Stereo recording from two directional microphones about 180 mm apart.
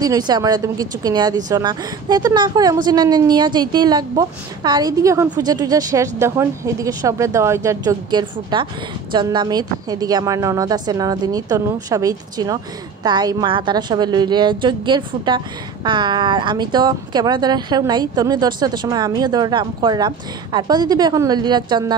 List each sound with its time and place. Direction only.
0.0 s a woman's voice: 20° right (ahead or behind)